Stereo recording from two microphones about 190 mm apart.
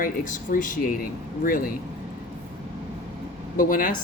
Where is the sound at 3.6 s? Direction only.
45° left (ahead or behind).